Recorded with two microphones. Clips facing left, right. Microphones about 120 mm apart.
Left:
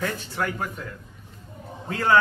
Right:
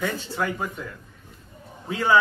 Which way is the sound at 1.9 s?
10° right (ahead or behind).